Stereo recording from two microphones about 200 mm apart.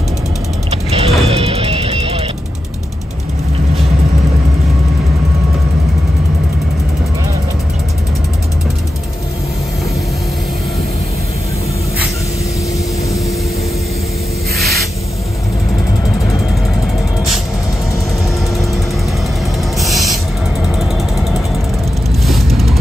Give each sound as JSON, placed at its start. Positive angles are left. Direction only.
{"t": 0.7, "sound": "vehicle", "side_deg": -30}
{"t": 1.2, "sound": "music", "side_deg": -30}
{"t": 19.8, "sound": "owl", "side_deg": 0}
{"t": 22.2, "sound": "a sound", "side_deg": 0}